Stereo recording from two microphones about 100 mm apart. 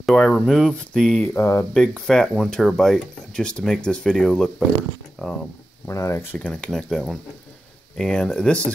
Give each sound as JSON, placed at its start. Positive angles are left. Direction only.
{"t": 0.0, "sound": "speech", "side_deg": 0}
{"t": 1.2, "sound": "speech", "side_deg": 25}
{"t": 1.7, "sound": "speech", "side_deg": 5}
{"t": 5.9, "sound": "speech", "side_deg": 30}
{"t": 6.3, "sound": "speech", "side_deg": 10}